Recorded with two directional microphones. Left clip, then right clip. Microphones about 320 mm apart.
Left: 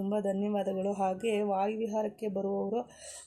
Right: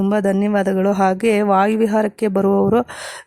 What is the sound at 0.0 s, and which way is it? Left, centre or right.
Speech, right.